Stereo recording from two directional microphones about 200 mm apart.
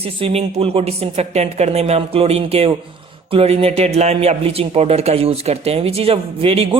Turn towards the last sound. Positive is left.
turn(degrees=-30)  # may be behind; listen again after turning